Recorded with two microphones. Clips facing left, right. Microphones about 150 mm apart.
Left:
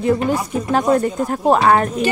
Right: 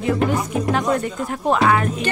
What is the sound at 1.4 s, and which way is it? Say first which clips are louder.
Speech: left 3 dB; 40° left (ahead or behind).